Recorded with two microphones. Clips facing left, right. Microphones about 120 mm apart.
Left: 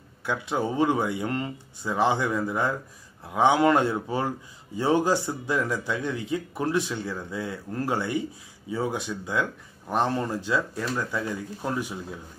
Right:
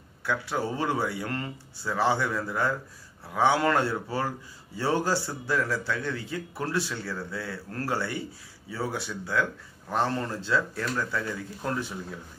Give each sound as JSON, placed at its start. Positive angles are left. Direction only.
{"t": 0.2, "sound": "speech", "side_deg": 20}